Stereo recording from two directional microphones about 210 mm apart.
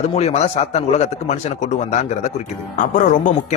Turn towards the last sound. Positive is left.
turn(degrees=35)  # may be behind; listen again after turning